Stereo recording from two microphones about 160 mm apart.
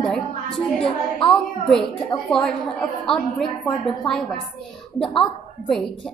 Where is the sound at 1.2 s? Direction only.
35° left (ahead or behind).